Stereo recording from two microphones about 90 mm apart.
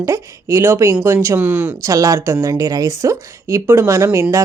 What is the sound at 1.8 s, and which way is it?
Speech, 35° right (ahead or behind).